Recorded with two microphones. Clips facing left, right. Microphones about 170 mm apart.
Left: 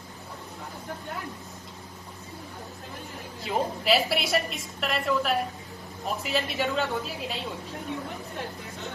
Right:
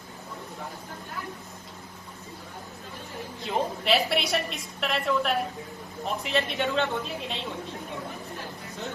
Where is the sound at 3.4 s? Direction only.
Centre (ahead or behind).